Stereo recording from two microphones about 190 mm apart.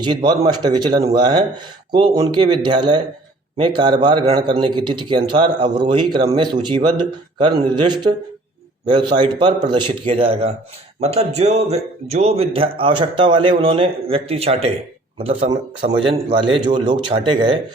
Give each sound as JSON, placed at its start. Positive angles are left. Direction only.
{"t": 0.0, "sound": "a man's voice", "side_deg": -25}